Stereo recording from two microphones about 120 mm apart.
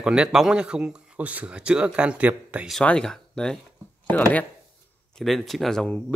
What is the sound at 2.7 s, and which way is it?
Speech, 5° left (ahead or behind).